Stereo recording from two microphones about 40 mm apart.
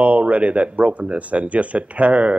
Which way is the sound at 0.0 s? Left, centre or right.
Right.